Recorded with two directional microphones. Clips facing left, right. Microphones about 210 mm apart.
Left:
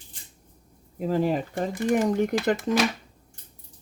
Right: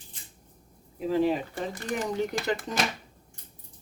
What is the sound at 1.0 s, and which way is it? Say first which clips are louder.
Speech: left 1 dB; 45° left (ahead or behind).